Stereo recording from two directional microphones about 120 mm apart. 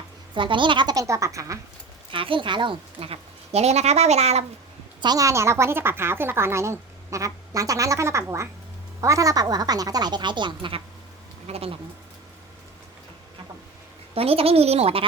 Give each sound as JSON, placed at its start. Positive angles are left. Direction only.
{"t": 0.3, "sound": "speech", "side_deg": -45}
{"t": 2.1, "sound": "speech", "side_deg": -45}
{"t": 4.9, "sound": "speech", "side_deg": -35}
{"t": 14.1, "sound": "speech", "side_deg": -55}